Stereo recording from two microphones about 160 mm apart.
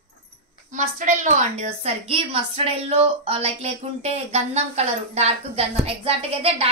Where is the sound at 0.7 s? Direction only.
50° right (ahead or behind).